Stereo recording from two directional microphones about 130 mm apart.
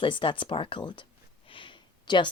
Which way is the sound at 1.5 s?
40° left (ahead or behind).